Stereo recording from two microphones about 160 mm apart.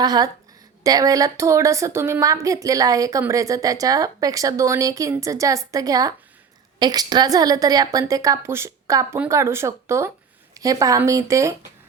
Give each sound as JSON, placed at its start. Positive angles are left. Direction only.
{"t": 0.0, "sound": "speech", "side_deg": -25}